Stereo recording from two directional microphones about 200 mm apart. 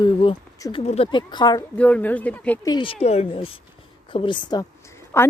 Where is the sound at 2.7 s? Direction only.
25° left (ahead or behind).